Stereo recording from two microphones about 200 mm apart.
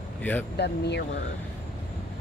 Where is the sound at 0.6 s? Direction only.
55° left (ahead or behind).